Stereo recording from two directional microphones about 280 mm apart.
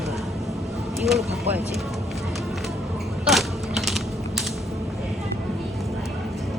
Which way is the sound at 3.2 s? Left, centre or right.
Centre.